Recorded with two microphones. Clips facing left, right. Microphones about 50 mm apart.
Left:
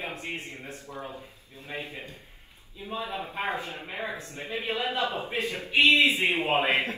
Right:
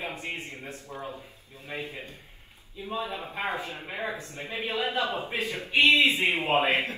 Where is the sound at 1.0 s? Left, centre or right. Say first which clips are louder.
Right 1 dB; left.